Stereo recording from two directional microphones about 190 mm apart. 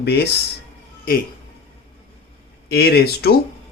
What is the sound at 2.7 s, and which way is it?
Speech, 55° left (ahead or behind).